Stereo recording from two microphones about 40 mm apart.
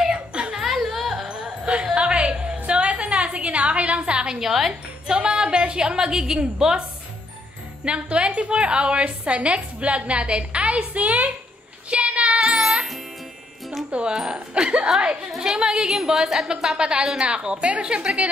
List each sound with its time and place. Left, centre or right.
0.1 s chuckle: right
0.6 s a sound: centre
1.3 s music: right
2.0 s a sound: right
4.4 s a woman's voice: centre
5.0 s a woman's voice: right
7.8 s a woman's voice: right
11.9 s child singing: right
12.4 s music: centre
13.8 s speech: right
14.1 s a woman's voice: centre
14.5 s a woman's voice: right
16.1 s a woman's voice: centre; by 18.3 s right